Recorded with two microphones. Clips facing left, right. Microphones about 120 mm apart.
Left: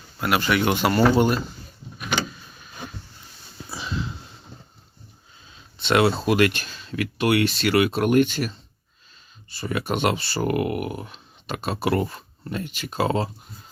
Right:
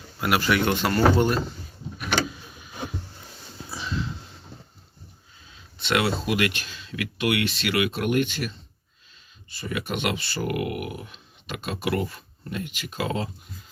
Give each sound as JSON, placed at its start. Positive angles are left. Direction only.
{"t": 0.2, "sound": "speech", "side_deg": 0}
{"t": 0.6, "sound": "speech", "side_deg": 10}
{"t": 3.7, "sound": "a sound", "side_deg": 10}
{"t": 5.8, "sound": "speech", "side_deg": 30}
{"t": 6.2, "sound": "speech", "side_deg": 45}